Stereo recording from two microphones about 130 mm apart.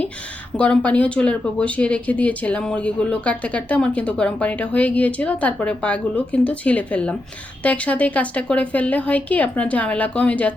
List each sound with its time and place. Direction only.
0.5 s speech: 10° left (ahead or behind)